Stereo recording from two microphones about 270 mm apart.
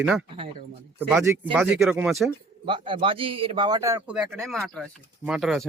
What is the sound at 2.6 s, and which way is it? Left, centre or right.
A man's voice, centre.